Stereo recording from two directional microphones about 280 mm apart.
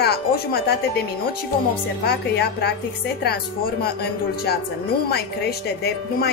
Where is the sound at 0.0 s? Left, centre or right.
Left.